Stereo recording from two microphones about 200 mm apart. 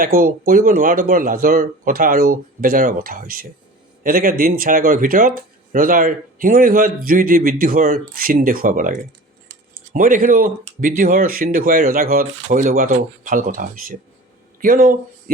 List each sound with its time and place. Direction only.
0.0 s speech: 45° right (ahead or behind)